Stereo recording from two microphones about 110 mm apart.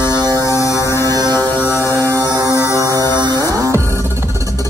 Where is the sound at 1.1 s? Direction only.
35° right (ahead or behind).